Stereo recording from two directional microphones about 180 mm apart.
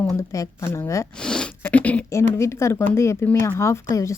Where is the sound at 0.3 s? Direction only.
15° left (ahead or behind).